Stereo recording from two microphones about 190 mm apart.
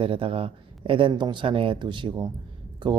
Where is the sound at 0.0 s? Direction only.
30° right (ahead or behind).